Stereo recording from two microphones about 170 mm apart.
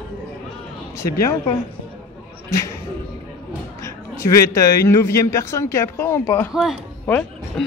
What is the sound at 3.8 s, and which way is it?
A man's voice, 15° left (ahead or behind).